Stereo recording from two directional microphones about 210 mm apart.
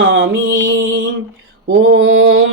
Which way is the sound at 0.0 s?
60° right (ahead or behind).